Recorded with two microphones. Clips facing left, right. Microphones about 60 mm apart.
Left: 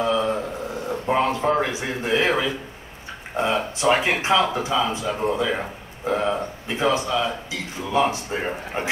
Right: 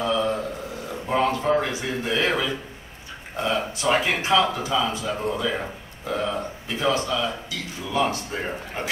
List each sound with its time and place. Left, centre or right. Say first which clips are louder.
0.0 s a sound: left 2 dB; centre
1.1 s a man's voice: even; centre
3.8 s speech: left 3 dB; centre